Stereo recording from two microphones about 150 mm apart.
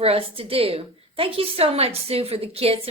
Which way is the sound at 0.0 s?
40° right (ahead or behind).